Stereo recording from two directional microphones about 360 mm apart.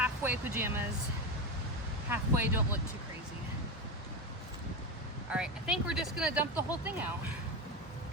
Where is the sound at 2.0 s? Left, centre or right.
Centre.